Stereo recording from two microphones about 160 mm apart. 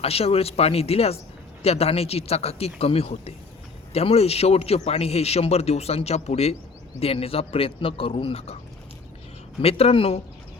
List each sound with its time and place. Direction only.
0.0 s a man's voice: 40° left (ahead or behind)
9.6 s a man's voice: 40° left (ahead or behind)